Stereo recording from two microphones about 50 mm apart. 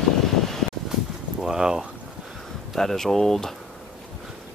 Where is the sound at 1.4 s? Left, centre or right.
Centre.